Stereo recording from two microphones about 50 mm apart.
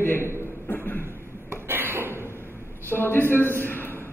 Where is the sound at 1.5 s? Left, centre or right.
Right.